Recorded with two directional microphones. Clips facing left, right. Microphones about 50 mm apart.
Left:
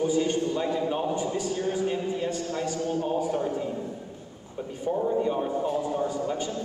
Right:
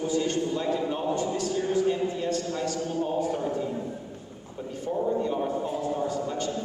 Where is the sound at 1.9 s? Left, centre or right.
Centre.